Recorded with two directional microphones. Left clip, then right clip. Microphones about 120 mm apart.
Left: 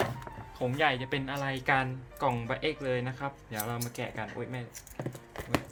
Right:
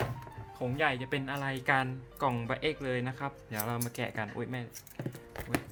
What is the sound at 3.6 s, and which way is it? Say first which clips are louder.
Speech: right 2 dB; 50° right (ahead or behind).